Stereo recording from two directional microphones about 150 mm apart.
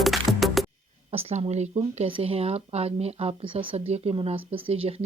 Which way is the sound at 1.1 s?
45° right (ahead or behind).